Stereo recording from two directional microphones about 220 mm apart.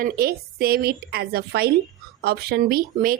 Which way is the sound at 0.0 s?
45° right (ahead or behind).